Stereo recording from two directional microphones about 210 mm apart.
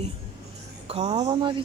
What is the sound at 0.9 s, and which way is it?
Speech, 25° right (ahead or behind).